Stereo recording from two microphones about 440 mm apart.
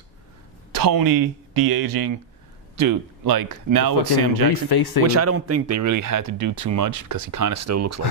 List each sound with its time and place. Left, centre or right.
0.7 s speech: right
4.7 s speech: left
5.0 s speech: right